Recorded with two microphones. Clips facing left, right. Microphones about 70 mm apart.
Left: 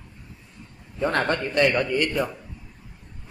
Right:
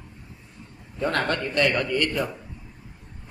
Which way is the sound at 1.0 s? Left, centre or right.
Centre.